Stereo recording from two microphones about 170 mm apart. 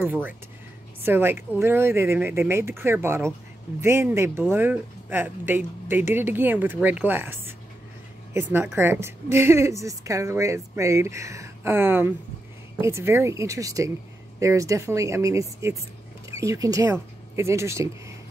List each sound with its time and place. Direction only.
0.0 s a woman's voice: 10° right (ahead or behind)